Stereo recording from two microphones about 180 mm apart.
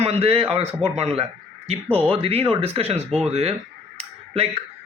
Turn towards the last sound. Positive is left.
turn(degrees=-35)  # may be behind; listen again after turning